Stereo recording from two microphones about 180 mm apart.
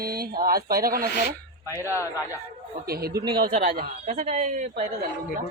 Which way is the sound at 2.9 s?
60° right (ahead or behind).